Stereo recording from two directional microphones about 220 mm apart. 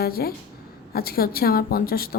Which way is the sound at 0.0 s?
45° left (ahead or behind).